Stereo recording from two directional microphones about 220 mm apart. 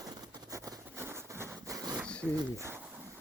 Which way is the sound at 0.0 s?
20° right (ahead or behind).